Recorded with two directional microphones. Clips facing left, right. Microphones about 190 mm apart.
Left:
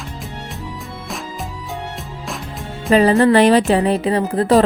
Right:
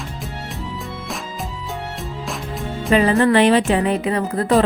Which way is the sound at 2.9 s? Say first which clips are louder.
Left 3 dB; 35° left (ahead or behind).